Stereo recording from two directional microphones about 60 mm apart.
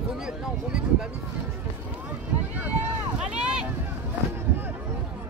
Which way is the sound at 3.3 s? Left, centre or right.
Centre.